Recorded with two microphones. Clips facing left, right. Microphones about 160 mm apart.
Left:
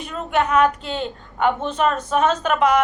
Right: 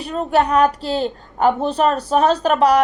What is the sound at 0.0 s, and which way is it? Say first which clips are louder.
A woman's voice: right 4 dB; 35° right (ahead or behind).